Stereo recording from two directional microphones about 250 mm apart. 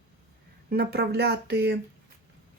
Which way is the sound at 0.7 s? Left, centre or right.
Right.